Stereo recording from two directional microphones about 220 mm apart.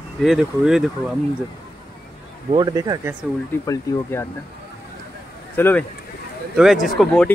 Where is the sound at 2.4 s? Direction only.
20° right (ahead or behind).